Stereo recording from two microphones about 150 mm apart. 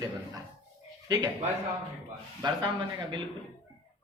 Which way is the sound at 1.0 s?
25° right (ahead or behind).